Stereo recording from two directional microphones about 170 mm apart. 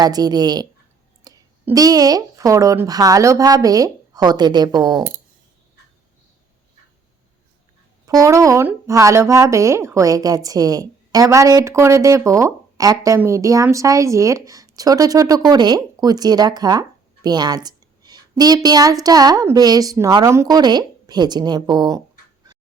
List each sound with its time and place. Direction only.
0.0 s a woman's voice: 25° right (ahead or behind)
1.3 s a sound: 20° right (ahead or behind)
1.6 s a woman's voice: 20° right (ahead or behind)
8.0 s a woman's voice: 20° right (ahead or behind)